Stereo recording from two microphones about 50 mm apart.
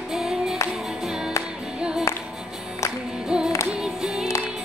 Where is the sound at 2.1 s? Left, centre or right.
Left.